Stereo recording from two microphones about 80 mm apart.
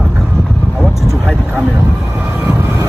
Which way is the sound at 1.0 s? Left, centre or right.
Centre.